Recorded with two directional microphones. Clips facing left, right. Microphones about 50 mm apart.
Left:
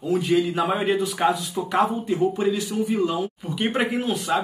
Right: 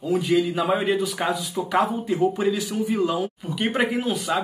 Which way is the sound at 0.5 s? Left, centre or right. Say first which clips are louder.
Even; centre.